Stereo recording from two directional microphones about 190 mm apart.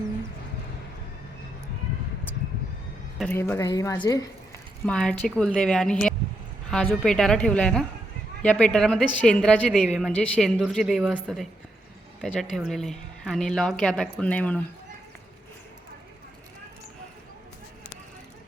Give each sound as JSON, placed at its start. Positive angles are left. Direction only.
{"t": 3.2, "sound": "a woman's voice", "side_deg": 10}
{"t": 4.9, "sound": "a woman's voice", "side_deg": 5}